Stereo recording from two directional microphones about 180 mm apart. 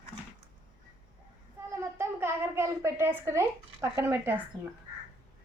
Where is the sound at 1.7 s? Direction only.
15° right (ahead or behind).